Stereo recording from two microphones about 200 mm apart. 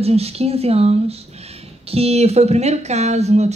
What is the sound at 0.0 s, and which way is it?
Speech, 30° right (ahead or behind).